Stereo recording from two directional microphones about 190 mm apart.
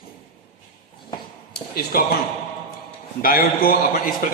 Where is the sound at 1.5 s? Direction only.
50° left (ahead or behind).